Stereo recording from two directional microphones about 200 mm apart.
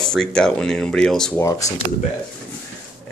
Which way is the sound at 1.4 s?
15° left (ahead or behind).